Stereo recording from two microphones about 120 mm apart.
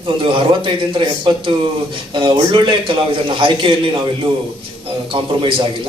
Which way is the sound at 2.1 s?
40° right (ahead or behind).